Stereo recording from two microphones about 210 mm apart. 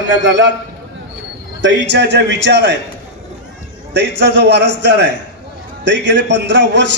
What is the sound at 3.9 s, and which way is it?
A man's voice, 55° right (ahead or behind).